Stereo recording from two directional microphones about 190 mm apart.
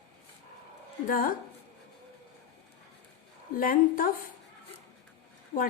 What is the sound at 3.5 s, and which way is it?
Speech, 45° left (ahead or behind).